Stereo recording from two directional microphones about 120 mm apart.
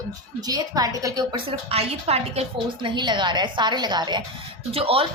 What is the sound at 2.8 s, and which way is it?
Speech, 40° right (ahead or behind).